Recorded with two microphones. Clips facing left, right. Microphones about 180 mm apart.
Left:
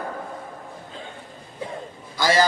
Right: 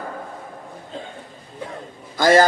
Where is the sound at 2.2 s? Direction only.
50° right (ahead or behind).